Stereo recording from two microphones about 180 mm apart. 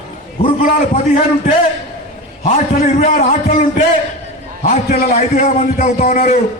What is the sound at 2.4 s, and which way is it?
A man's voice, 45° left (ahead or behind).